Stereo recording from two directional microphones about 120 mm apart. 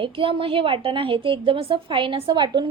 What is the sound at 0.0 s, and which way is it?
A woman's voice, 45° right (ahead or behind).